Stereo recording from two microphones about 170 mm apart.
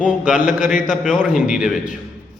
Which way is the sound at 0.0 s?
5° right (ahead or behind).